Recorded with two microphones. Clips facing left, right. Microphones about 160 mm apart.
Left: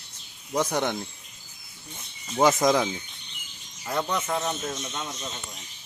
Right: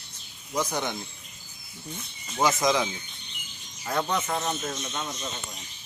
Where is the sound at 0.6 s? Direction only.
60° left (ahead or behind).